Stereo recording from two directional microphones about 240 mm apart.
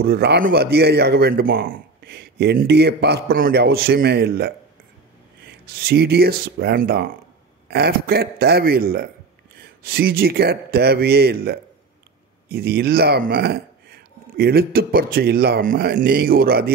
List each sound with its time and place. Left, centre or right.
0.0 s a man's voice: right
5.7 s a man's voice: right